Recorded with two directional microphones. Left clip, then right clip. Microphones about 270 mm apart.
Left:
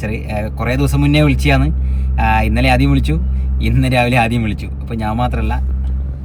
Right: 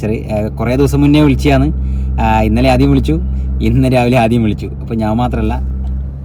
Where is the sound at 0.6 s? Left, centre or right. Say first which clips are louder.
Right 5 dB; centre.